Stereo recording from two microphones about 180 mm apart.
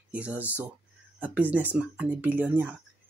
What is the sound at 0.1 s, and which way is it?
Speech, 5° right (ahead or behind).